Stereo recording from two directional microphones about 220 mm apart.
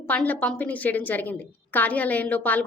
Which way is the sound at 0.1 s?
5° left (ahead or behind).